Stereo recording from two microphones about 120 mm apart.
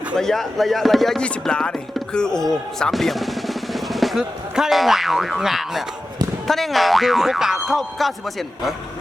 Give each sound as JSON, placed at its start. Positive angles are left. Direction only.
{"t": 0.2, "sound": "speech", "side_deg": 5}